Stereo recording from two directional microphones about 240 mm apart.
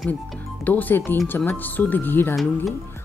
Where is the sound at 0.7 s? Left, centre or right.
Centre.